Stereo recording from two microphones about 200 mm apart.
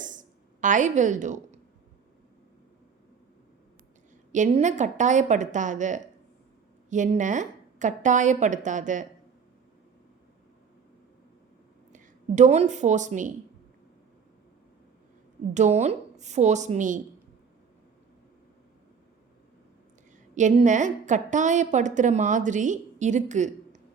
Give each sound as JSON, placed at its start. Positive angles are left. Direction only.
{"t": 0.0, "sound": "a sound", "side_deg": -40}
{"t": 4.3, "sound": "a woman's voice", "side_deg": -40}
{"t": 11.9, "sound": "a woman's voice", "side_deg": -40}
{"t": 15.5, "sound": "a woman's voice", "side_deg": -35}
{"t": 20.3, "sound": "a woman's voice", "side_deg": -40}